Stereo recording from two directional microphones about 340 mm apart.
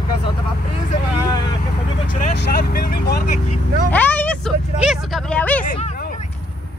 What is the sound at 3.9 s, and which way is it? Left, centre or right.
Speech, centre.